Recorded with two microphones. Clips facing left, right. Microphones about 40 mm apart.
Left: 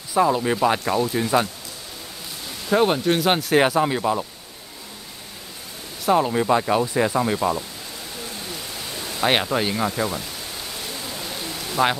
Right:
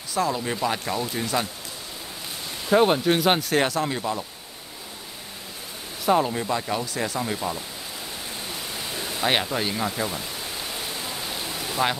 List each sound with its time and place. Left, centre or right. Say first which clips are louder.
0.1 s speech: left 6 dB; centre
2.7 s speech: even; centre
3.5 s speech: left 5 dB; centre
6.0 s speech: left 2 dB; centre
6.3 s speech: left 7 dB; centre
8.5 s pink noise: even; centre
9.2 s speech: left 4 dB; centre
10.2 s pink noise: right 1 dB; centre